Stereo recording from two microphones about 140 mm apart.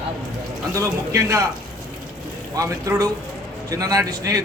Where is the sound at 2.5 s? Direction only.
25° right (ahead or behind).